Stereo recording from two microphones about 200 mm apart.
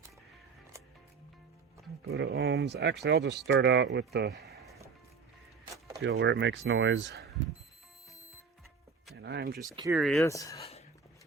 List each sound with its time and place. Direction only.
2.0 s speech: 60° right (ahead or behind)
6.0 s speech: 65° right (ahead or behind)
9.1 s speech: 60° right (ahead or behind)
9.6 s speech: 15° right (ahead or behind)
9.9 s speech: centre (ahead or behind)
10.2 s speech: 15° left (ahead or behind)
10.6 s whispering: 30° left (ahead or behind)